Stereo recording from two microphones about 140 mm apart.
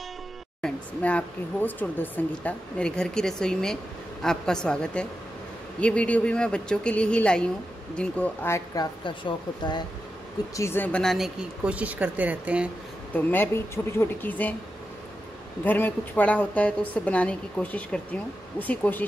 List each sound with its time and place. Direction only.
0.6 s a woman's voice: 5° left (ahead or behind)
9.0 s speech: 35° left (ahead or behind)
10.5 s speech: 20° left (ahead or behind); by 12.6 s 10° right (ahead or behind)
13.1 s a woman's voice: 15° left (ahead or behind)
15.6 s a woman's voice: 10° left (ahead or behind)